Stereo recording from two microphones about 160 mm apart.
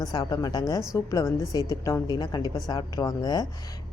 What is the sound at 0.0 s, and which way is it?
Speech, 25° left (ahead or behind).